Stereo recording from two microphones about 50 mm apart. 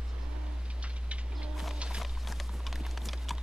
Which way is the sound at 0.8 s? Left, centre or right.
Right.